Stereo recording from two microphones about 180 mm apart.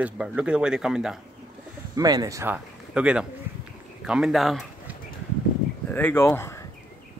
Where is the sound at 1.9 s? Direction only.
20° right (ahead or behind); by 5.0 s centre (ahead or behind).